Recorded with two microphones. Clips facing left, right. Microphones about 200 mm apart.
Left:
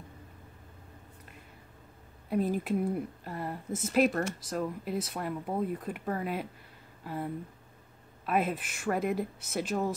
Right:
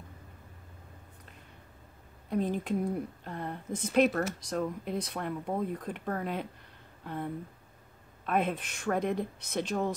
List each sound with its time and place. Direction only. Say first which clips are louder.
2.2 s a woman's voice: left 1 dB; 5° left (ahead or behind)
8.3 s a woman's voice: even; 5° left (ahead or behind)